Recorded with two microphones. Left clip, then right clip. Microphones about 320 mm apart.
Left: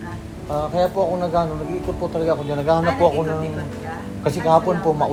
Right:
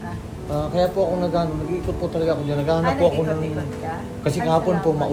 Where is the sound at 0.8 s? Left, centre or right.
Centre.